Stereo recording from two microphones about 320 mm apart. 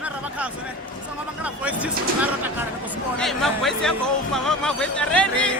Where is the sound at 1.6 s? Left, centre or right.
Centre.